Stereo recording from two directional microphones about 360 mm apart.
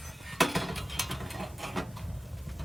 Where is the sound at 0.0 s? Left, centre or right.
Centre.